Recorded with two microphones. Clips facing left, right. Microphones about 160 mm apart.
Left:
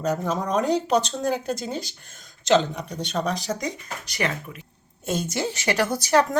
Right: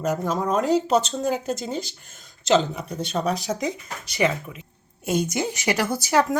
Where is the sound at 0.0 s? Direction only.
5° right (ahead or behind).